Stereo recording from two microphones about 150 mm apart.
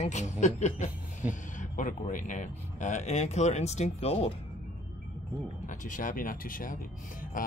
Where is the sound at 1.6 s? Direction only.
60° left (ahead or behind); by 4.3 s 45° left (ahead or behind).